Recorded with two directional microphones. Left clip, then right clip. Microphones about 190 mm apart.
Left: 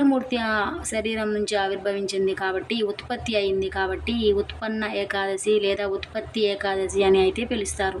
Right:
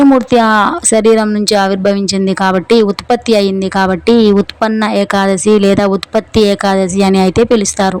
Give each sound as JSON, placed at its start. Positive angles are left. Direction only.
{"t": 0.3, "sound": "speech", "side_deg": -45}